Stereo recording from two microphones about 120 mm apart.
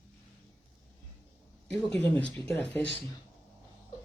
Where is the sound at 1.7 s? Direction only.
5° left (ahead or behind).